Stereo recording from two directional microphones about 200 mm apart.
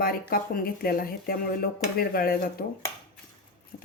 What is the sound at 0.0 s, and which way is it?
Speech, 45° left (ahead or behind).